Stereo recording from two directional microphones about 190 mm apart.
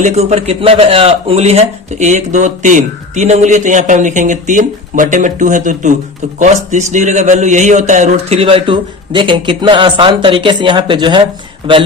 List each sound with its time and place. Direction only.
0.0 s a man's voice: 35° right (ahead or behind)